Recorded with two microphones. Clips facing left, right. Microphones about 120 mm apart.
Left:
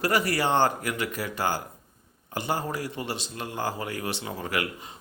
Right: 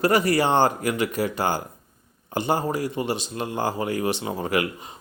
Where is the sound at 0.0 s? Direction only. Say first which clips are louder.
Right 5 dB; 20° right (ahead or behind).